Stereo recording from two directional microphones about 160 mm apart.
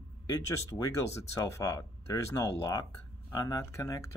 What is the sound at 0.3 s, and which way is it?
Speech, 20° left (ahead or behind).